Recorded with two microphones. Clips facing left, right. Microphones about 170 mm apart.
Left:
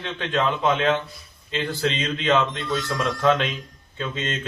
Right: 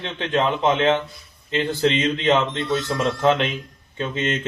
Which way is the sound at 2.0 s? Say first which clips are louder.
Right 2 dB; 25° right (ahead or behind).